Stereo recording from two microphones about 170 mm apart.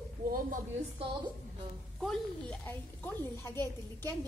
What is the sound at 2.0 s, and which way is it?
A woman's voice, 5° left (ahead or behind).